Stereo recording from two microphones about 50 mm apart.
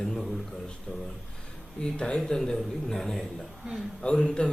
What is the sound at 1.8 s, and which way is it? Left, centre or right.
A man's voice, centre.